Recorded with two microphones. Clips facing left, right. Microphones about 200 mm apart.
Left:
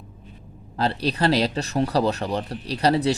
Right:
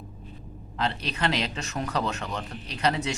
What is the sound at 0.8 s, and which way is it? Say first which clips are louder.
Speech: left 6 dB; 35° left (ahead or behind).